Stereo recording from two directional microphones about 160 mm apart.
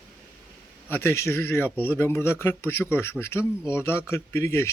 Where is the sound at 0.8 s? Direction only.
15° left (ahead or behind).